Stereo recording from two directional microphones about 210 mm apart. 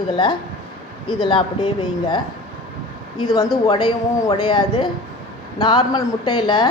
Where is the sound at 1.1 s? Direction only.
20° left (ahead or behind).